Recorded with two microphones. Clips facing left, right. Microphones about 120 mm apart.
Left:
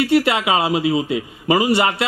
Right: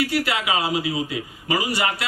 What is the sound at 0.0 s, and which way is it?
A man's voice, 25° left (ahead or behind).